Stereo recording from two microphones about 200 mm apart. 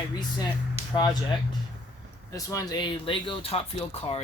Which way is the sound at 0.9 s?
20° left (ahead or behind).